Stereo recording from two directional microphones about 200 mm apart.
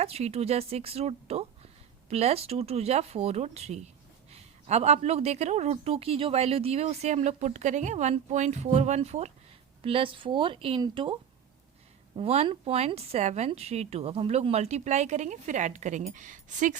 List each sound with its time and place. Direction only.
0.0 s speech: 30° right (ahead or behind)